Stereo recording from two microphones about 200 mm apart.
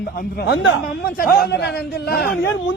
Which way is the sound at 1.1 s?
55° left (ahead or behind).